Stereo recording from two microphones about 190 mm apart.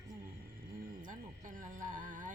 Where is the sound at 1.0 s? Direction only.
45° right (ahead or behind).